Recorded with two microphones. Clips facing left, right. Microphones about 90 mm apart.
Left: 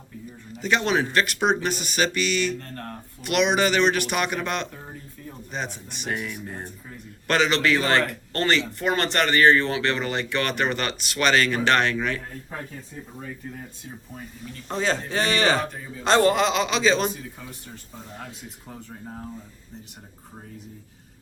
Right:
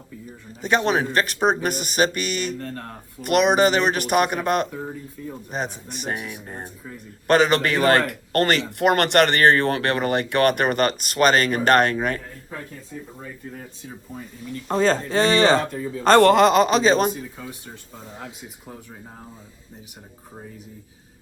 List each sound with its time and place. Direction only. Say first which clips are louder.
0.5 s speech: right 2 dB; 40° right (ahead or behind)
14.7 s speech: right 6 dB; 40° right (ahead or behind)
16.0 s speech: right 6 dB; 60° right (ahead or behind); by 17.2 s 40° right (ahead or behind)